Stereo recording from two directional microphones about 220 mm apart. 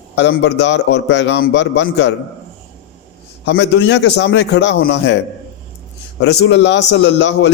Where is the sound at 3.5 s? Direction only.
50° left (ahead or behind).